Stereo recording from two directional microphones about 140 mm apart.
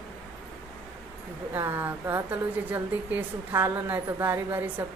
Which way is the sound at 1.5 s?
15° right (ahead or behind).